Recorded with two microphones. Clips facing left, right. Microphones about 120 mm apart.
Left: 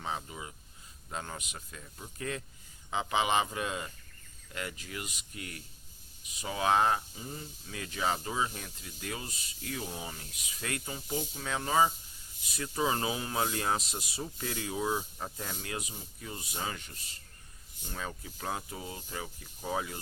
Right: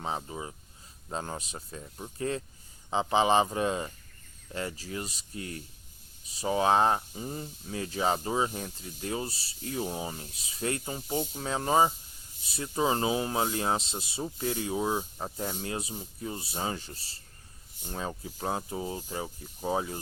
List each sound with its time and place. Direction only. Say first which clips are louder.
0.0 s speech: right 4 dB; 35° right (ahead or behind)